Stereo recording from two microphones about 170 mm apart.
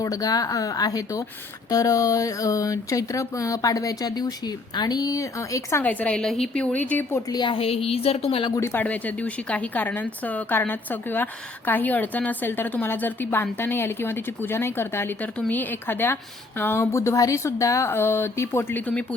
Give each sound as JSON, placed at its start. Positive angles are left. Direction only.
{"t": 0.0, "sound": "speech", "side_deg": 20}
{"t": 7.2, "sound": "a woman's voice", "side_deg": 25}
{"t": 8.6, "sound": "speech", "side_deg": 10}